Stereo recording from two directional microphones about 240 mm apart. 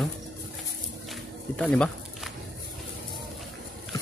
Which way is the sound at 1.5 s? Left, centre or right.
Centre.